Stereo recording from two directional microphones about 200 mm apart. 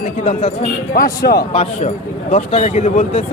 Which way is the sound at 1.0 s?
50° left (ahead or behind).